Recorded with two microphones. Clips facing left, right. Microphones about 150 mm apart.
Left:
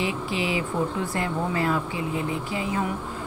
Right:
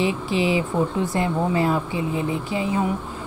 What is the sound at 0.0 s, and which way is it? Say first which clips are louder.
A woman's voice: right 5 dB; 25° right (ahead or behind).